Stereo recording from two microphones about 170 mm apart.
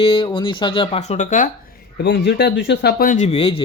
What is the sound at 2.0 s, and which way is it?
A man's voice, 85° left.